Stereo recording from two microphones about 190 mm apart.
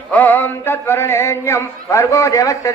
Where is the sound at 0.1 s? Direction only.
10° left (ahead or behind).